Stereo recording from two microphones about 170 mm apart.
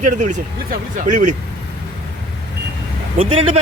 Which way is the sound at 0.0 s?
45° right (ahead or behind).